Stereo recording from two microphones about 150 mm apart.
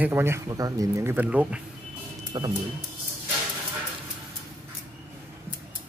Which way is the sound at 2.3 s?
30° right (ahead or behind).